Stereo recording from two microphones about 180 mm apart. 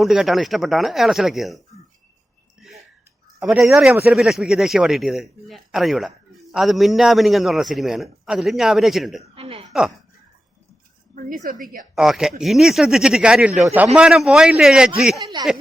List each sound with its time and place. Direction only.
0.0 s a man's voice: centre (ahead or behind)
3.4 s a man's voice: centre (ahead or behind)
9.3 s speech: 30° right (ahead or behind)
9.6 s a man's voice: centre (ahead or behind)
11.6 s a woman's voice: 50° right (ahead or behind)
11.9 s a man's voice: 5° right (ahead or behind)
15.2 s speech: 25° right (ahead or behind)